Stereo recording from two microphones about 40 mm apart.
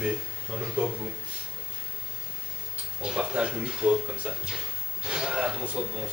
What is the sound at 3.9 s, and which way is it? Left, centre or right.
Speech, right.